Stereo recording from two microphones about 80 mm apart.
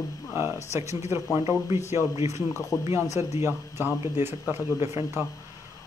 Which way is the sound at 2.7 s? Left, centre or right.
Left.